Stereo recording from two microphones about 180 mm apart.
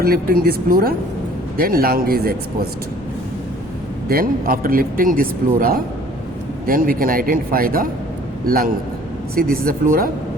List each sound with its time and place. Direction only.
0.0 s a man's voice: 55° right (ahead or behind)
4.1 s a man's voice: 55° right (ahead or behind)